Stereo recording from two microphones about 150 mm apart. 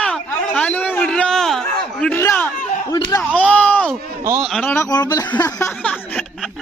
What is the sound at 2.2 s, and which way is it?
Speech, 15° left (ahead or behind).